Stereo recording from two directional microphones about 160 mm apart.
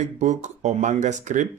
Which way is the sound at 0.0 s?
45° right (ahead or behind).